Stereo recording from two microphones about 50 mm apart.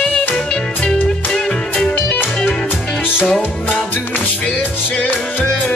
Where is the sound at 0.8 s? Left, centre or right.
Centre.